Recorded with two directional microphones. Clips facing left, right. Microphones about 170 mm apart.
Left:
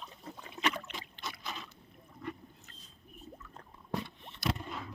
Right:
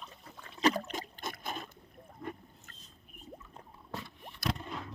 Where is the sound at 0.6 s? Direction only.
35° right (ahead or behind).